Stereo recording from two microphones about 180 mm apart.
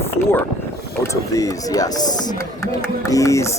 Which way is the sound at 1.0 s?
15° left (ahead or behind).